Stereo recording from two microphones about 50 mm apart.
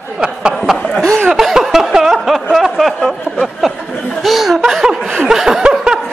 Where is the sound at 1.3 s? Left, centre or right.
Centre.